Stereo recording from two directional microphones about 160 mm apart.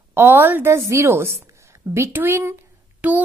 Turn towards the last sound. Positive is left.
turn(degrees=-10)  # may be behind; listen again after turning